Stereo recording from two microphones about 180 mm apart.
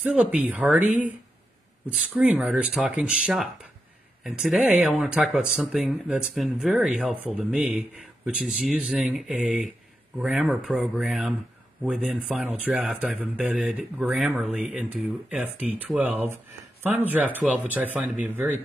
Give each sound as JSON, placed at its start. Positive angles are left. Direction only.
{"t": 0.0, "sound": "speech", "side_deg": -10}
{"t": 1.9, "sound": "speech", "side_deg": -5}